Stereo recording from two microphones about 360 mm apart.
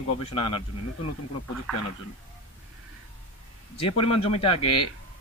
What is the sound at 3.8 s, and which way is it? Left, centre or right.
Speech, centre.